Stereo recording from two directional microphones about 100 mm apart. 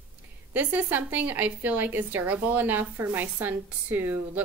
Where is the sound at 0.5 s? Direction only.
15° right (ahead or behind).